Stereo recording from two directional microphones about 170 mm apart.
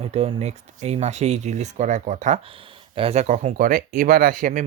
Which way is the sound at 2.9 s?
35° right (ahead or behind).